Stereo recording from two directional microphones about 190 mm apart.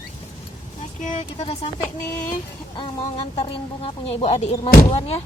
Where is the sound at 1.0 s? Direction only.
35° left (ahead or behind).